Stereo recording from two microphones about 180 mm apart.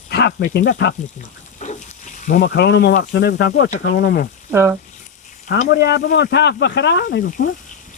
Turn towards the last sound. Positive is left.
turn(degrees=55)  # may be behind; listen again after turning